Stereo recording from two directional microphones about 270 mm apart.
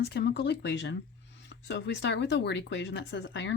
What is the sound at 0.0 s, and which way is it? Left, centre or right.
Speech, left.